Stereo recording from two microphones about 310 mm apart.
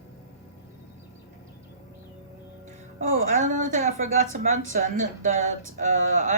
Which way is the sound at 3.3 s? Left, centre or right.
Right.